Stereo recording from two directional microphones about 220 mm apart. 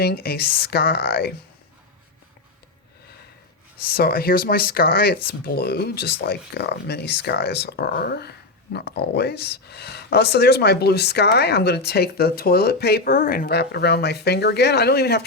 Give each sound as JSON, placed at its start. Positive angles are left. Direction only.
{"t": 0.0, "sound": "speech", "side_deg": 45}
{"t": 3.8, "sound": "speech", "side_deg": 45}